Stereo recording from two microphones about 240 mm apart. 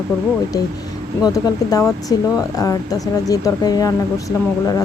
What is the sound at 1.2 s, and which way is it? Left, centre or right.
Speech, centre.